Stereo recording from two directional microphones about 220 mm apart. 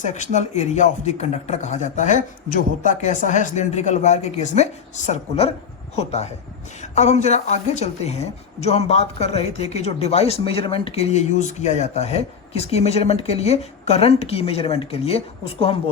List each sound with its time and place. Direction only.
0.0 s a man's voice: 35° left (ahead or behind)